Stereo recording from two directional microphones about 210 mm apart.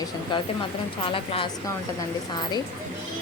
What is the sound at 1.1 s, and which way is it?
Speech, 25° left (ahead or behind).